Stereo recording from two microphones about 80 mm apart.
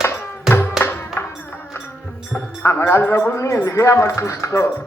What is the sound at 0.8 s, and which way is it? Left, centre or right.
Music, left.